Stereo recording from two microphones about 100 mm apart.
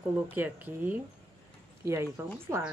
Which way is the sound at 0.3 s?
15° right (ahead or behind).